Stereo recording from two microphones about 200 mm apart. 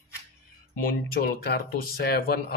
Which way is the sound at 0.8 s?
50° left (ahead or behind).